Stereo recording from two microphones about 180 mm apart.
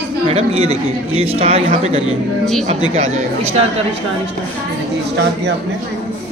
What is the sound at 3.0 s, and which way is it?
Speech, 35° right (ahead or behind).